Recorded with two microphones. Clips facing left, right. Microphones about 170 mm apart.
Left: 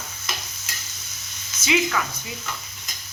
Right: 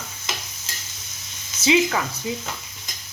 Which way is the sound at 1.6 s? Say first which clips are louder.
Right 4 dB; 30° right (ahead or behind).